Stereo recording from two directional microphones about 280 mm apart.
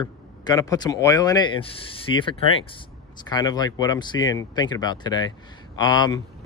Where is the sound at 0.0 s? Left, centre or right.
Centre.